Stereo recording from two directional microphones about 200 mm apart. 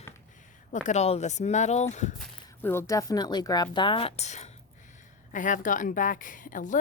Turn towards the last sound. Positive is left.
turn(degrees=40)  # may be behind; listen again after turning